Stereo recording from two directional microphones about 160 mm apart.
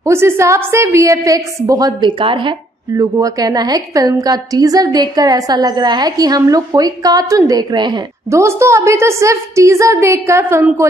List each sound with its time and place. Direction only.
0.0 s a woman's voice: 15° right (ahead or behind)